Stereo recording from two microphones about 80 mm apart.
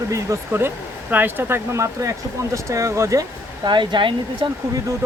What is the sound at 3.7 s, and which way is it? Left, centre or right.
Speech, right.